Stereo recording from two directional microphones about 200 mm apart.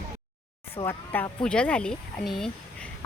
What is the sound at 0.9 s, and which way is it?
Speech, 10° left (ahead or behind).